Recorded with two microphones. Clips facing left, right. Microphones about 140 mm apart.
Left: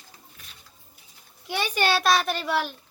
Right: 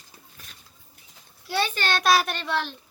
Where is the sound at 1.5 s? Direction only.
15° left (ahead or behind).